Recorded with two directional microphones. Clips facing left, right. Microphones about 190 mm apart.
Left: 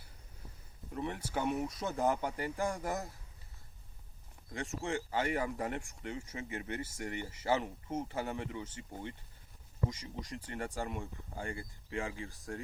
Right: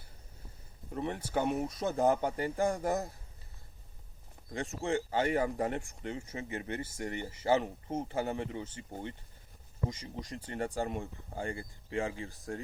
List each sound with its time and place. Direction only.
0.9 s speech: 35° right (ahead or behind)
4.5 s speech: 35° right (ahead or behind)